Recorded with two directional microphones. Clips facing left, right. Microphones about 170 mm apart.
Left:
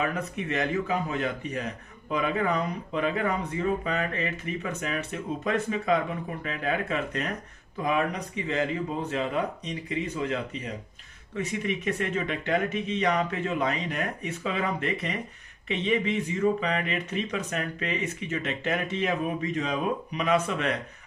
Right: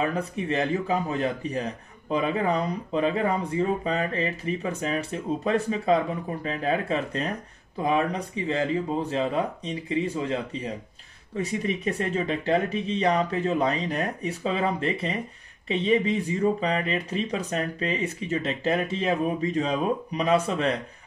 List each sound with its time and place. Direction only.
0.0 s a man's voice: 30° right (ahead or behind)